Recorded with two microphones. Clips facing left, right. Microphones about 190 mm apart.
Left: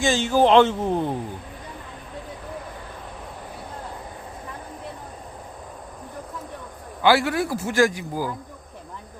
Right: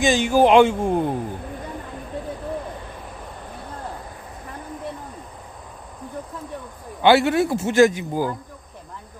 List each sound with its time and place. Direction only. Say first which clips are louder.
0.0 s speech: right 2 dB; 15° right (ahead or behind)
7.0 s a man's voice: right 4 dB; 25° right (ahead or behind)